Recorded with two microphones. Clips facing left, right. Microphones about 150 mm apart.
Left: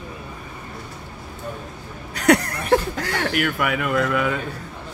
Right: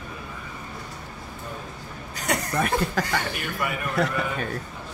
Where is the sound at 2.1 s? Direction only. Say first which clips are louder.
Left 11 dB; 65° left (ahead or behind).